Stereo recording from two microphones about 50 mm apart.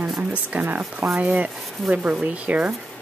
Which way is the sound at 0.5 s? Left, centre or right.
Right.